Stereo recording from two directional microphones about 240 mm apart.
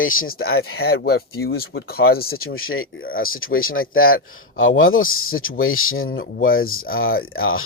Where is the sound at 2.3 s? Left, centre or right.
Left.